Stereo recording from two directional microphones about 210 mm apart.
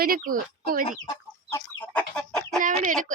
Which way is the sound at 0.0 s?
40° right (ahead or behind).